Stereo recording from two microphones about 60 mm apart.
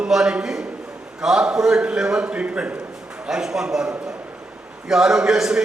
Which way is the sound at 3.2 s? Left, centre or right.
Centre.